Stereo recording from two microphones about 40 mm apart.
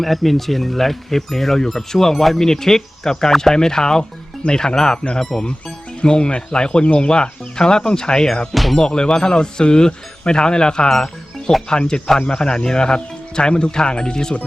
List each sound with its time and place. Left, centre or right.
0.0 s speech: centre